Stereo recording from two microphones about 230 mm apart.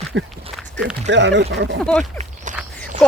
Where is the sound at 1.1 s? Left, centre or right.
Right.